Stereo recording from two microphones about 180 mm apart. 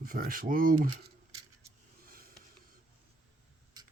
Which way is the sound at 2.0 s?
55° right (ahead or behind).